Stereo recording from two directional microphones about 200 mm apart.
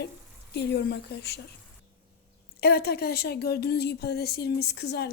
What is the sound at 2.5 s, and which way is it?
A woman's voice, 50° left (ahead or behind).